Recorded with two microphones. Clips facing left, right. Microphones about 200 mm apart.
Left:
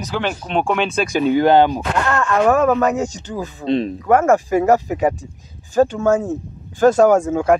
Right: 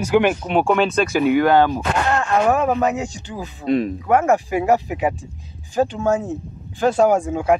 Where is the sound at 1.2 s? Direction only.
30° left (ahead or behind).